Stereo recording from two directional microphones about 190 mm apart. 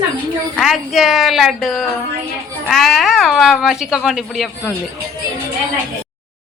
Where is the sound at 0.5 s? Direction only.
Centre (ahead or behind).